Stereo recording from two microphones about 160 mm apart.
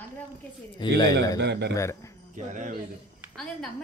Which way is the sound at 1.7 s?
20° left (ahead or behind).